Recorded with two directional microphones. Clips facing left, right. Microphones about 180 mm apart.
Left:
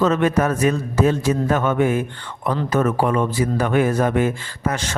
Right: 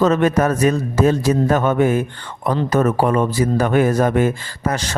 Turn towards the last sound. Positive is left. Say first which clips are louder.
# right 2 dB
turn(degrees=-40)  # may be behind; listen again after turning